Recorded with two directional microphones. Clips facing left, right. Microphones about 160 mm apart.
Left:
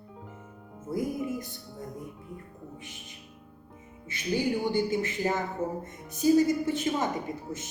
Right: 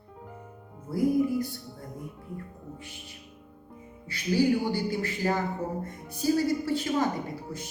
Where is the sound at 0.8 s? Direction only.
20° left (ahead or behind).